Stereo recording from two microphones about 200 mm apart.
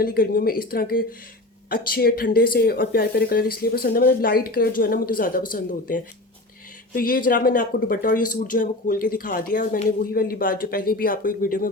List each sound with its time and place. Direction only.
0.0 s speech: 45° left (ahead or behind)